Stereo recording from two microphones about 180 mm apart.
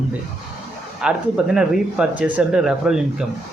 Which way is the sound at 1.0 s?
5° right (ahead or behind).